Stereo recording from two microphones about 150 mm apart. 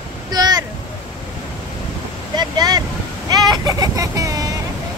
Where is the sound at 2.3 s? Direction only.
25° right (ahead or behind).